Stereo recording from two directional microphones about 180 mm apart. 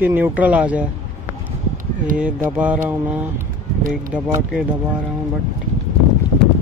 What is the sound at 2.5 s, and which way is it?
Speech, 10° right (ahead or behind).